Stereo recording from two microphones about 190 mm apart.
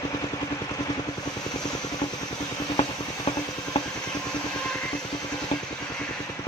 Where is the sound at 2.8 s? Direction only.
25° left (ahead or behind).